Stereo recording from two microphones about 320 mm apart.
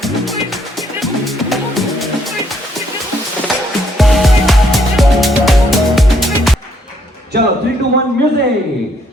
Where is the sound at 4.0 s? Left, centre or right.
Centre.